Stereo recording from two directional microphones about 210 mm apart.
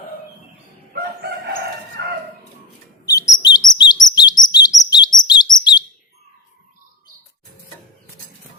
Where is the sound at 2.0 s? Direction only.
50° right (ahead or behind).